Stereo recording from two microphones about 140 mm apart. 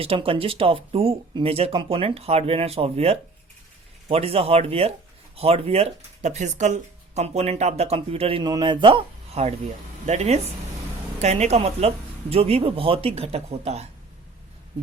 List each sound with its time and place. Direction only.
0.0 s speech: 40° right (ahead or behind)